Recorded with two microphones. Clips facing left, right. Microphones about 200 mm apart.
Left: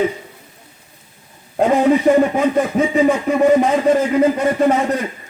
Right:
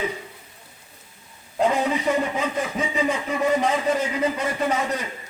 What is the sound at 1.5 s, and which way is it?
Speech, 50° left (ahead or behind).